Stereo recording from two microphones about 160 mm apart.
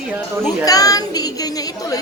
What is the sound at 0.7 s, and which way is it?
Speech, 20° left (ahead or behind).